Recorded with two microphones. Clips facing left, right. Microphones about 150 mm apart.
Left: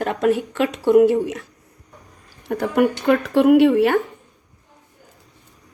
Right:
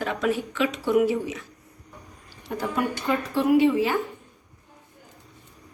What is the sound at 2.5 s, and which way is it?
Speech, 65° left (ahead or behind).